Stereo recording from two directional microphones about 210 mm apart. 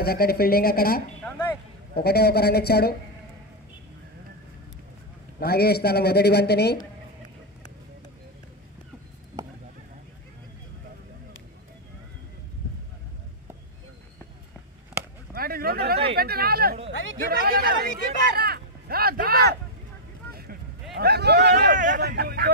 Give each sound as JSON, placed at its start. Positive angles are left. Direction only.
{"t": 0.0, "sound": "speech", "side_deg": 45}
{"t": 5.4, "sound": "speech", "side_deg": 50}
{"t": 15.3, "sound": "a sound", "side_deg": -45}
{"t": 16.2, "sound": "speech", "side_deg": -45}
{"t": 21.0, "sound": "speech", "side_deg": -50}